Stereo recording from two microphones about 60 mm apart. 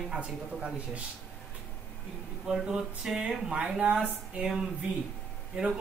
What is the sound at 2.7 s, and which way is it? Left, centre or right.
Speech, centre.